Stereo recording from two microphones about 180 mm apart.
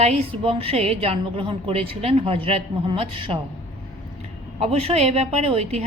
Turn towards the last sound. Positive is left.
turn(degrees=-35)  # may be behind; listen again after turning